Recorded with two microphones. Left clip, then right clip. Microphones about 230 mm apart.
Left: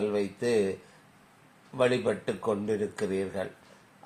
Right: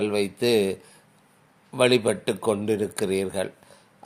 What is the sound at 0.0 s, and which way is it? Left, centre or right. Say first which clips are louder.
Speech: right 5 dB; right.